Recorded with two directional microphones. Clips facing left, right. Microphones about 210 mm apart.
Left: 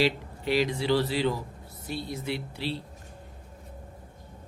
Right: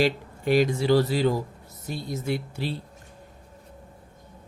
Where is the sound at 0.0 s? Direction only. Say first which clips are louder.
Right 3 dB; 50° right (ahead or behind).